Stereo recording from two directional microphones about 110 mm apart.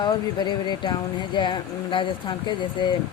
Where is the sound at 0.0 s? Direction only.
40° left (ahead or behind).